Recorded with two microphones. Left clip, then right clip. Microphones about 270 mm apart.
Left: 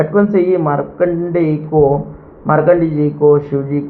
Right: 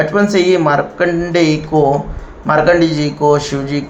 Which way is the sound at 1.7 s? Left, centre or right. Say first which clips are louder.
Left 2 dB; right.